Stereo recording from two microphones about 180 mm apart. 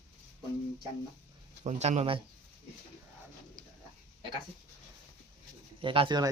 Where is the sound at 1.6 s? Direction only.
40° right (ahead or behind).